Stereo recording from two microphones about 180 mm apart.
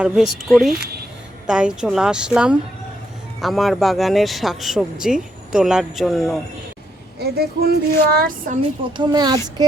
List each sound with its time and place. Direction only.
0.0 s speech: centre (ahead or behind)
7.2 s speech: 60° right (ahead or behind)
8.9 s speech: 25° right (ahead or behind)